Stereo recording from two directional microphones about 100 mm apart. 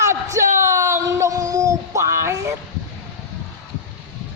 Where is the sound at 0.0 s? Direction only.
30° right (ahead or behind).